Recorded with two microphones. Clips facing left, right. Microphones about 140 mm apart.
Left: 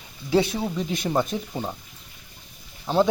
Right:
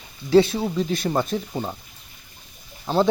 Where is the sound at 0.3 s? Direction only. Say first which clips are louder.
Right 5 dB; 15° left (ahead or behind).